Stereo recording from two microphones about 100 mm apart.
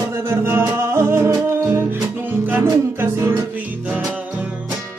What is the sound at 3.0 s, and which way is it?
Music, 25° right (ahead or behind).